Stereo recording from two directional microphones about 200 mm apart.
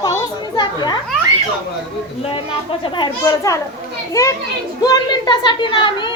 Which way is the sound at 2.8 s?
25° left (ahead or behind).